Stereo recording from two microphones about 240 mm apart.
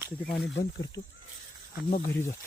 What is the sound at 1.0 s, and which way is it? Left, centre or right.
Speech, left.